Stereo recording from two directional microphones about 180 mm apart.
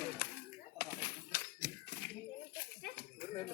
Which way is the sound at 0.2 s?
60° left (ahead or behind).